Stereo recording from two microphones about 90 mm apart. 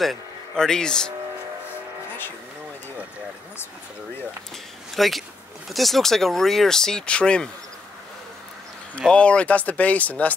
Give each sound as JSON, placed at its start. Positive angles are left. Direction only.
{"t": 0.0, "sound": "speech", "side_deg": 5}
{"t": 4.9, "sound": "speech", "side_deg": 0}
{"t": 9.1, "sound": "speech", "side_deg": 15}